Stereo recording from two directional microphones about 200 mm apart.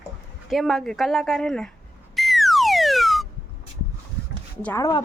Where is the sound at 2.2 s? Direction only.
Centre (ahead or behind).